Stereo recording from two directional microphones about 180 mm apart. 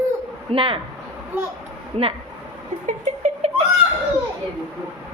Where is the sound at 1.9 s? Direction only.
35° right (ahead or behind).